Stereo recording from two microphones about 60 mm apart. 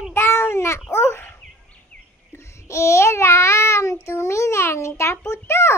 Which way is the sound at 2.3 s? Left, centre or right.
Left.